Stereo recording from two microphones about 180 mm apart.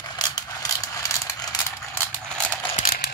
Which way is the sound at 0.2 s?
20° left (ahead or behind).